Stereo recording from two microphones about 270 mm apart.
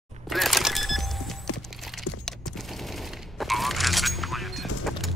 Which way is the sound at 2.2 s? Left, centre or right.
Centre.